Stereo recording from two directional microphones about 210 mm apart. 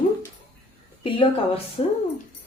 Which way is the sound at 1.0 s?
25° left (ahead or behind).